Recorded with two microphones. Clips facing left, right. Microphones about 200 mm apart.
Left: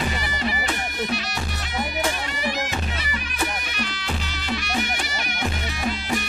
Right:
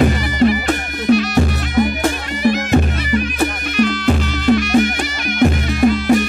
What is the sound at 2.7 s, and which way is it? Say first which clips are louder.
Music: right 14 dB; 50° right (ahead or behind).